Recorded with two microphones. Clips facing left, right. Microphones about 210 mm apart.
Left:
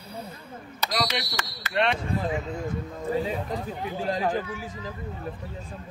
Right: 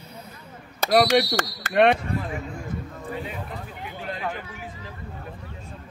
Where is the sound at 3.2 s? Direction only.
35° left (ahead or behind).